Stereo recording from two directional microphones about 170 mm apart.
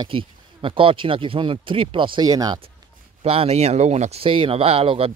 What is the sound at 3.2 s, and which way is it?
Speech, 35° right (ahead or behind).